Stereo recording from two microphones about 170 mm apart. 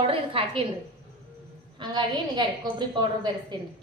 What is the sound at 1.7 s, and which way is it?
A woman's voice, 25° right (ahead or behind).